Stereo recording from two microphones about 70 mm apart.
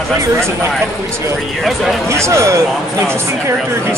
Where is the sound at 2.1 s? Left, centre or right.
Right.